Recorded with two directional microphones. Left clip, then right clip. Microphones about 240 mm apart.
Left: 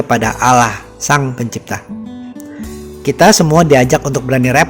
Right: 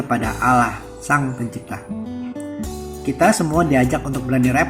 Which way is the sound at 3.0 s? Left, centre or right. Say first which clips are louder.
Left 8 dB; left.